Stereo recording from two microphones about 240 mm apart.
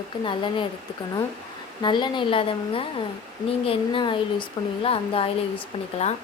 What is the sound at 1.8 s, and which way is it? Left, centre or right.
Speech, centre.